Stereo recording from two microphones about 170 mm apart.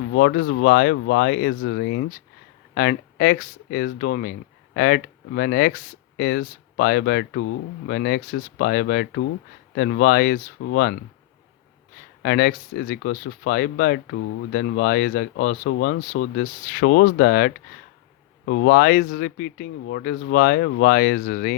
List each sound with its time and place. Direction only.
0.1 s speech: 85° left
2.7 s speech: 65° left (ahead or behind)
12.2 s speech: 70° left (ahead or behind)
18.4 s speech: 80° left; by 21.5 s 60° left (ahead or behind)